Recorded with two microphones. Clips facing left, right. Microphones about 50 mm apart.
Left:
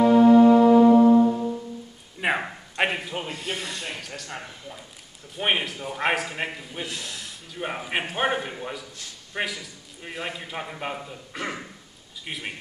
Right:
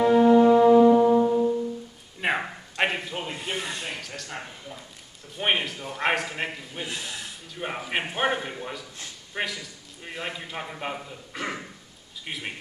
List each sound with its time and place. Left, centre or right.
0.0 s music: centre
2.1 s a sound: centre
3.3 s speech: centre
3.8 s a man's voice: centre
6.9 s speech: centre
7.5 s a man's voice: centre